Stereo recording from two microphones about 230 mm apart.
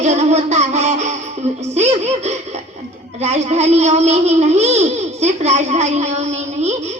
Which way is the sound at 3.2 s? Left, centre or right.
Right.